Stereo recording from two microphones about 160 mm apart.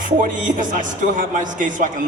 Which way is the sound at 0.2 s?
55° right (ahead or behind).